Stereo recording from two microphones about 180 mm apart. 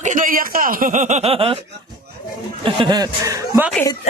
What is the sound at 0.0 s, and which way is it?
Speech, 45° right (ahead or behind).